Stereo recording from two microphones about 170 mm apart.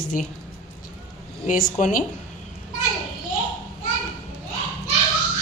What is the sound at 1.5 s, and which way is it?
Speech, 50° left (ahead or behind).